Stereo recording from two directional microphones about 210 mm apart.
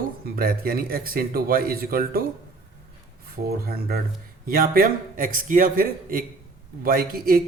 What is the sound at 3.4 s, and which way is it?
A man's voice, 45° right (ahead or behind).